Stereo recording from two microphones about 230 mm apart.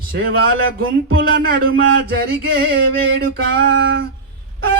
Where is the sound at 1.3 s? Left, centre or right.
Right.